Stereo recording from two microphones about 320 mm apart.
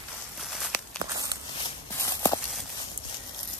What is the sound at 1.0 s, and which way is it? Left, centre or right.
Walk, centre.